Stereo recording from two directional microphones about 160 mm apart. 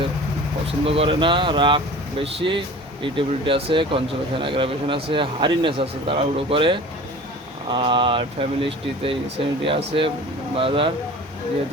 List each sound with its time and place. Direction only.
0.9 s speech: 35° right (ahead or behind)